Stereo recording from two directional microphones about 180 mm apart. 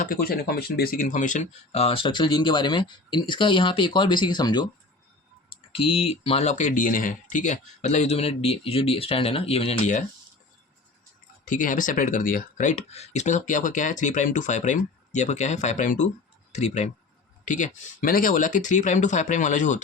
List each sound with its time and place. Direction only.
0.0 s speech: 55° left (ahead or behind); by 4.7 s 25° left (ahead or behind)
5.7 s speech: 30° left (ahead or behind)
11.4 s speech: 45° left (ahead or behind)